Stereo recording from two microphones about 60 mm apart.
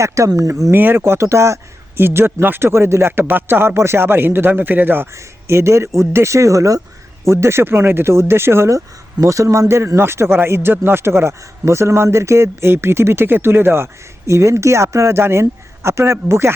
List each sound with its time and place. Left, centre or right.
0.0 s speech: right
0.7 s speech: right
2.0 s speech: right
5.1 s speech: right
7.3 s speech: right
9.2 s speech: right